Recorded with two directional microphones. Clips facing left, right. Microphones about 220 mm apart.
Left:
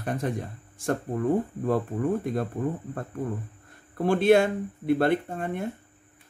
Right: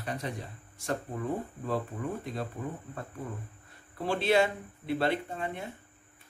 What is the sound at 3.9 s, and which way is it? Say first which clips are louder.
Speech: left 7 dB; 50° left (ahead or behind).